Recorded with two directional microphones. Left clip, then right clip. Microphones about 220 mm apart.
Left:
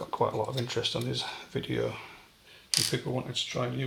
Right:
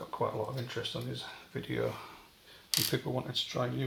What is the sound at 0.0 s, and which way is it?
Speech, 5° left (ahead or behind).